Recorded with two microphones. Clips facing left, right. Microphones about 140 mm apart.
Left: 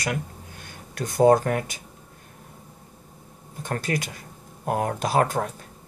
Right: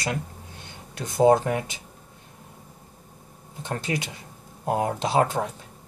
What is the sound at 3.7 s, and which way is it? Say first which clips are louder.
Speech: left 1 dB; 20° right (ahead or behind).